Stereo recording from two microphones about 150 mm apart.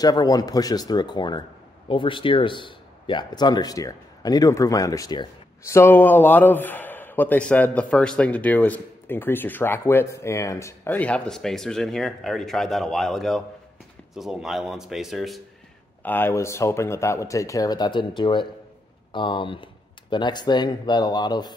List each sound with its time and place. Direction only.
0.0 s a man's voice: 25° left (ahead or behind)
5.7 s a man's voice: 15° left (ahead or behind); by 15.4 s centre (ahead or behind)
16.0 s a man's voice: 15° left (ahead or behind); by 21.5 s 30° left (ahead or behind)